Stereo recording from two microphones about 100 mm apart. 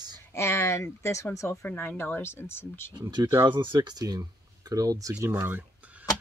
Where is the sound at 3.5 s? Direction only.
55° right (ahead or behind); by 5.2 s 35° right (ahead or behind).